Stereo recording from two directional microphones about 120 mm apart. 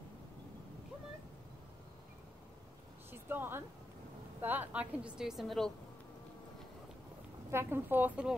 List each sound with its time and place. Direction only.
3.1 s a woman's voice: 20° right (ahead or behind); by 5.7 s centre (ahead or behind)
7.5 s a woman's voice: 20° right (ahead or behind)